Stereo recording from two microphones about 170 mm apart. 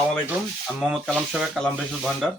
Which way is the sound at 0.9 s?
5° right (ahead or behind).